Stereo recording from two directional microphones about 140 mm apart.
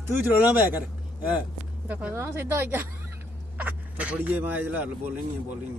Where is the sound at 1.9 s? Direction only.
10° right (ahead or behind).